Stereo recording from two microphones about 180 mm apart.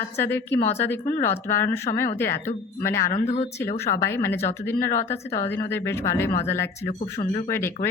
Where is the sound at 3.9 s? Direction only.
15° left (ahead or behind).